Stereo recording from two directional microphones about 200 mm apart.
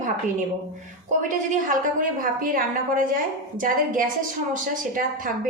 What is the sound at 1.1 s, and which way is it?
A woman's voice, 40° right (ahead or behind).